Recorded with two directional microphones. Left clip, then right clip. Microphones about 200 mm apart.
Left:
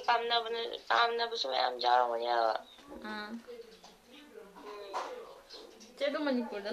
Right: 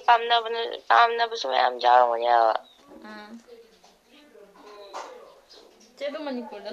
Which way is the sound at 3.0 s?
Centre (ahead or behind).